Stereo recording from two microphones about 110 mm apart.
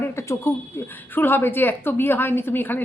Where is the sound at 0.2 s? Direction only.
25° left (ahead or behind).